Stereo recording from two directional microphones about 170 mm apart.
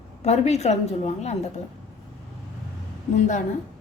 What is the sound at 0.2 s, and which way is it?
A woman's voice, 40° left (ahead or behind).